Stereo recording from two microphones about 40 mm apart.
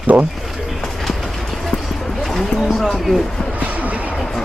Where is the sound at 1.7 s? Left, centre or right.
Left.